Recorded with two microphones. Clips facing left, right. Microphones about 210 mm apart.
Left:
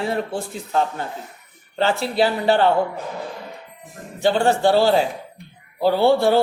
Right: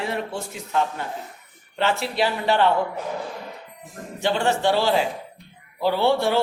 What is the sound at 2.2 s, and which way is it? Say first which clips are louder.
Speech: left 4 dB; 30° left (ahead or behind).